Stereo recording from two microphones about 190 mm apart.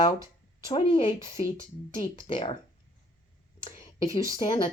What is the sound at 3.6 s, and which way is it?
Speech, 25° left (ahead or behind).